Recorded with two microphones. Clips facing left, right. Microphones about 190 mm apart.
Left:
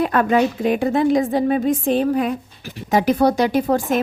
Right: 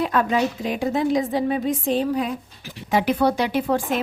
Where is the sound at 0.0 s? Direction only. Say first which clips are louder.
Left 4 dB; 55° left (ahead or behind).